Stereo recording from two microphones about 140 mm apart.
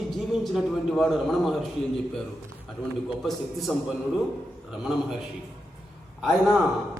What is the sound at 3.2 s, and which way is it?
A man's voice, centre (ahead or behind).